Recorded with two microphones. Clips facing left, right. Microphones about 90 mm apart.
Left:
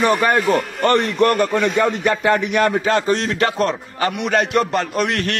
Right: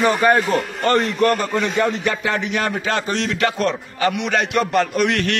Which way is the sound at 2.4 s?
45° left (ahead or behind).